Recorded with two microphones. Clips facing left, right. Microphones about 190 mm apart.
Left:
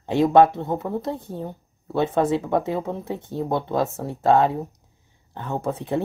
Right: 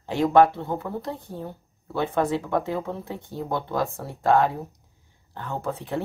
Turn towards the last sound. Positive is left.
turn(degrees=20)  # may be behind; listen again after turning